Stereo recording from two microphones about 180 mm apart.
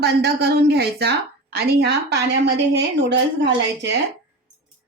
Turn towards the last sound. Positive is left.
turn(degrees=-75)  # may be behind; listen again after turning